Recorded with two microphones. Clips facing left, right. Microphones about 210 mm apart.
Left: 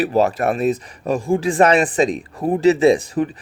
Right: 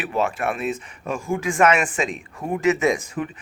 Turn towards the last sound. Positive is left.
turn(degrees=35)  # may be behind; listen again after turning